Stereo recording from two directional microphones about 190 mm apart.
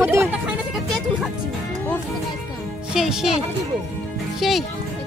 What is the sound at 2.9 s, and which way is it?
Speech, 5° right (ahead or behind).